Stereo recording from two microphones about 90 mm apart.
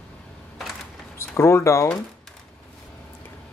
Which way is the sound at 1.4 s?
30° left (ahead or behind).